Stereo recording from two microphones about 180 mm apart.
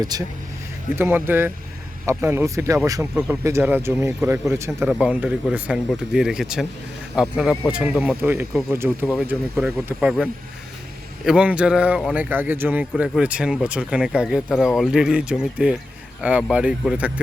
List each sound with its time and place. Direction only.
0.0 s speech: 20° right (ahead or behind); by 10.2 s 5° right (ahead or behind)
11.3 s speech: 5° right (ahead or behind)